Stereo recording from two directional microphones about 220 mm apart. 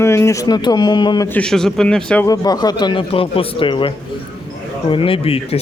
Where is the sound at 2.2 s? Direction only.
15° left (ahead or behind).